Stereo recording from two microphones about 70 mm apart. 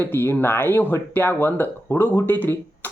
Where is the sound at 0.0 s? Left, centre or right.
Left.